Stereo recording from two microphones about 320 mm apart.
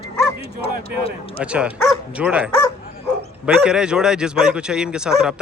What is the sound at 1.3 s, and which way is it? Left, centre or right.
Speech, centre.